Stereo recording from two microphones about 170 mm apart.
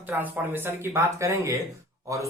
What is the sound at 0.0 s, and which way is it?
Speech, 10° right (ahead or behind).